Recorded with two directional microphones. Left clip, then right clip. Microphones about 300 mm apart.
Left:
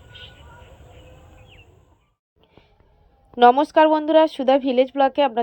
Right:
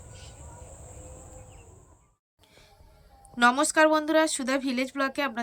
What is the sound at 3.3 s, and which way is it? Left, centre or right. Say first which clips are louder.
Speech: left 8 dB; centre.